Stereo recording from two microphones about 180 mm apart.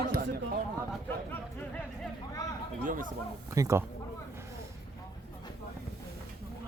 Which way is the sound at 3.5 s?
15° right (ahead or behind).